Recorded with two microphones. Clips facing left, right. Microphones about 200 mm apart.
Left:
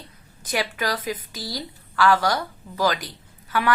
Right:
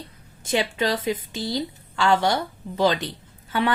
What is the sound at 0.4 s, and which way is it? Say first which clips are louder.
A woman's voice: right 3 dB; 25° right (ahead or behind).